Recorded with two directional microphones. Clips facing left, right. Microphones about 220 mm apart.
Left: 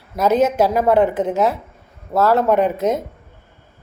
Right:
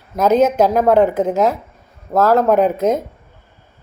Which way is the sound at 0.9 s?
40° right (ahead or behind).